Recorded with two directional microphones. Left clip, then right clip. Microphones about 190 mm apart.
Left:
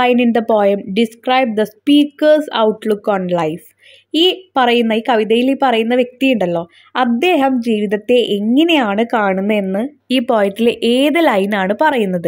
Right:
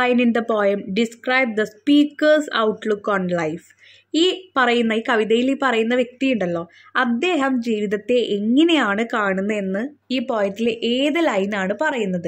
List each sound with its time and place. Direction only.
0.0 s a woman's voice: 15° left (ahead or behind)